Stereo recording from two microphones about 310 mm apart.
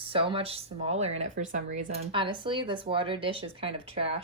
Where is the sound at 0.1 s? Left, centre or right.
Centre.